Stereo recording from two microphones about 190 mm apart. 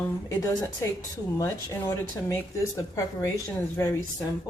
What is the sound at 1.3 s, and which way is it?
Speech, 20° left (ahead or behind).